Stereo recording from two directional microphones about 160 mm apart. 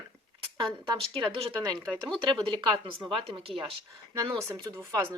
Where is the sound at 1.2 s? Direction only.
25° right (ahead or behind).